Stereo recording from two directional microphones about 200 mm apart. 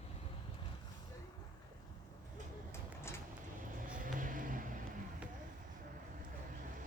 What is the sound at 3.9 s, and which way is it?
Vehicle, 40° right (ahead or behind).